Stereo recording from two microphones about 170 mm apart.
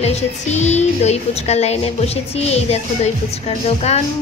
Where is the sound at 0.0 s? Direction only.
40° left (ahead or behind).